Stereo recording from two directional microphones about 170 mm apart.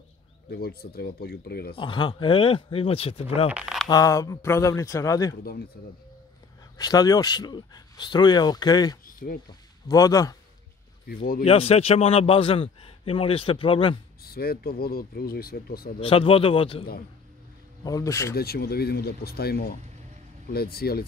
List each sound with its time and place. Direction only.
0.5 s speech: 65° left (ahead or behind)
1.8 s a man's voice: 30° left (ahead or behind)
3.4 s speech: 5° right (ahead or behind)
3.9 s speech: 20° left (ahead or behind)
6.8 s speech: 20° left (ahead or behind)
9.0 s a sound: 55° left (ahead or behind)
9.5 s a man's voice: 20° left (ahead or behind)
11.1 s speech: 60° left (ahead or behind)
11.4 s a man's voice: 35° left (ahead or behind)
14.2 s speech: 65° left (ahead or behind)
16.0 s a man's voice: 30° left (ahead or behind)
17.8 s speech: 20° left (ahead or behind)
18.3 s speech: 65° left (ahead or behind)